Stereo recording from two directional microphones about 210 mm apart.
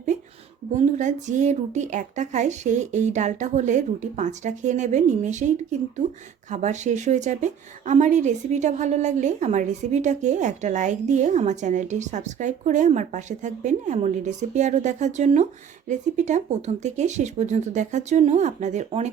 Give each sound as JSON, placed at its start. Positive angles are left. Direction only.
{"t": 0.8, "sound": "a woman's voice", "side_deg": -35}